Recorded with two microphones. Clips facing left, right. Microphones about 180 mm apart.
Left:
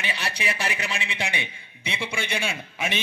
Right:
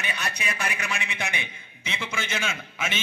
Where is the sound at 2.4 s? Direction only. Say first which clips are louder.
Left 2 dB; 35° left (ahead or behind).